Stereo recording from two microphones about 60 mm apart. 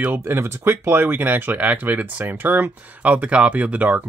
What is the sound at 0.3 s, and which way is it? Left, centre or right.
Speech, right.